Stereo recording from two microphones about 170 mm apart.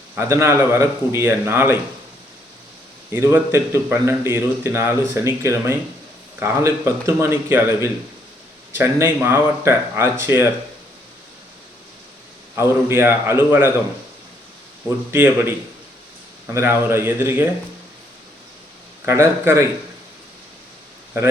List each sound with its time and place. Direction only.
0.2 s a man's voice: 15° right (ahead or behind)
3.1 s a man's voice: 15° right (ahead or behind)
12.5 s a man's voice: 15° right (ahead or behind)
15.1 s a man's voice: 15° right (ahead or behind)
19.0 s a man's voice: 15° right (ahead or behind)